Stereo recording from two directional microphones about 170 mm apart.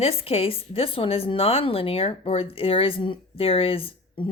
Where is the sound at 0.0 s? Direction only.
35° left (ahead or behind).